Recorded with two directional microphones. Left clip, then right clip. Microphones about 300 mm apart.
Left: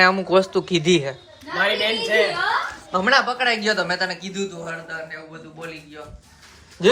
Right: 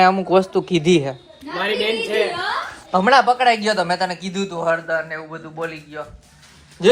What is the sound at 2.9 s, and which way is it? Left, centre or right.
A man's voice, centre.